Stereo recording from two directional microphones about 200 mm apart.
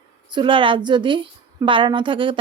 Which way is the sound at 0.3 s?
25° right (ahead or behind).